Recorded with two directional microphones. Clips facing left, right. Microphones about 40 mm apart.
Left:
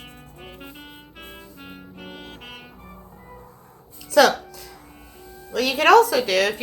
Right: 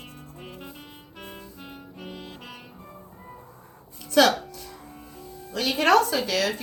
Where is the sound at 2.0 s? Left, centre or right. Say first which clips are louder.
Even; left.